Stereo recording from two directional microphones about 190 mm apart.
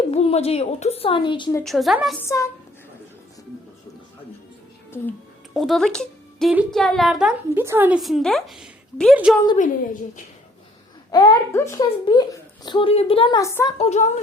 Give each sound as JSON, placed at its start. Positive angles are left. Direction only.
{"t": 0.1, "sound": "a woman's voice", "side_deg": 35}
{"t": 1.6, "sound": "a woman's voice", "side_deg": 0}
{"t": 2.2, "sound": "a woman's voice", "side_deg": 15}
{"t": 5.5, "sound": "a woman's voice", "side_deg": 0}
{"t": 11.1, "sound": "a woman's voice", "side_deg": 25}
{"t": 13.4, "sound": "a woman's voice", "side_deg": 15}
{"t": 13.7, "sound": "a woman's voice", "side_deg": 35}